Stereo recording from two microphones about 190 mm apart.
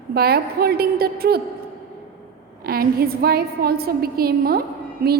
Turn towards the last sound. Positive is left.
turn(degrees=-50)  # may be behind; listen again after turning